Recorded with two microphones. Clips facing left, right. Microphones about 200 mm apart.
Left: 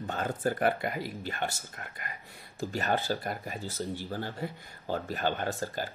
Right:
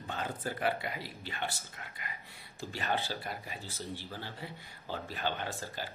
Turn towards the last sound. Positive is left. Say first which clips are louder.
# left 6 dB
turn(degrees=45)  # may be behind; listen again after turning